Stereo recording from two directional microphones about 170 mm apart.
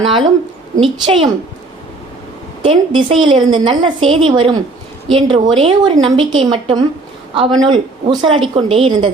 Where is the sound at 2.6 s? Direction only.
30° right (ahead or behind).